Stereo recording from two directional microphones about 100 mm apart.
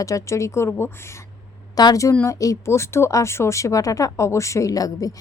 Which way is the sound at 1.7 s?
35° left (ahead or behind).